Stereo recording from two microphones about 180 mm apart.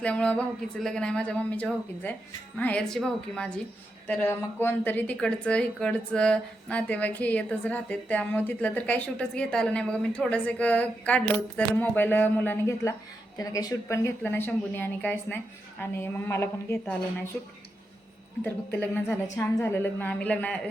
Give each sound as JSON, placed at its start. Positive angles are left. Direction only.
{"t": 0.0, "sound": "a woman's voice", "side_deg": 5}
{"t": 18.8, "sound": "a woman's voice", "side_deg": 10}